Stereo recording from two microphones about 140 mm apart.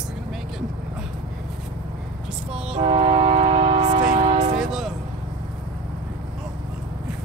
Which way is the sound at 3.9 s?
65° right (ahead or behind).